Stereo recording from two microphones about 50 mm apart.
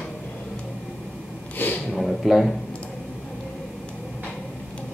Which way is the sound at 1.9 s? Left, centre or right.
Centre.